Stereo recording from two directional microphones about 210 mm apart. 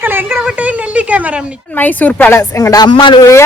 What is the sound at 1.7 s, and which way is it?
A woman's voice, 10° left (ahead or behind).